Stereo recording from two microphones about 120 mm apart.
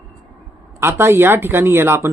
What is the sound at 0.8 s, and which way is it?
Speech, 20° right (ahead or behind).